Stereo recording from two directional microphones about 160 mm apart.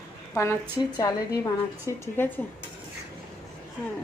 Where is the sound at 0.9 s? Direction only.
20° left (ahead or behind).